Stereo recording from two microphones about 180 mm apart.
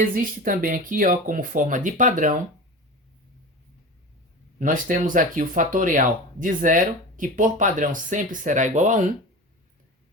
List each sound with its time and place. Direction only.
0.0 s speech: 50° right (ahead or behind)
4.6 s speech: 50° right (ahead or behind)